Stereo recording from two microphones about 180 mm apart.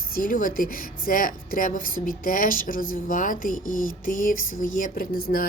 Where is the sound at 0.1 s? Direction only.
50° left (ahead or behind).